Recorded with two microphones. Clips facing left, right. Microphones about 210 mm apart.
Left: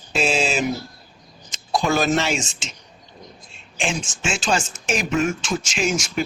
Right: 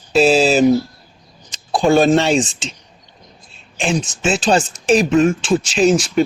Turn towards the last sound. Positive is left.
turn(degrees=-35)  # may be behind; listen again after turning